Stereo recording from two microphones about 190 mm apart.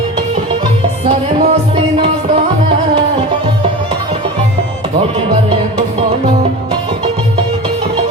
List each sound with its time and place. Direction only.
1.0 s music: 30° right (ahead or behind)